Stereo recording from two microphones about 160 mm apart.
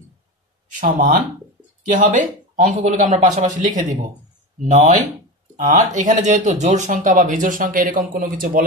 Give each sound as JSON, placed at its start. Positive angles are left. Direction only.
{"t": 0.7, "sound": "speech", "side_deg": -55}